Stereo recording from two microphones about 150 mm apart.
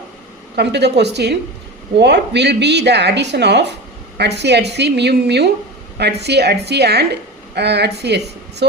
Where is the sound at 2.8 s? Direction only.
90° right.